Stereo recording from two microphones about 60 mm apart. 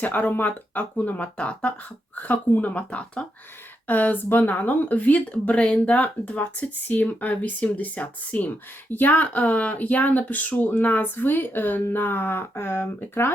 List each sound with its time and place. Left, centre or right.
0.0 s speech: left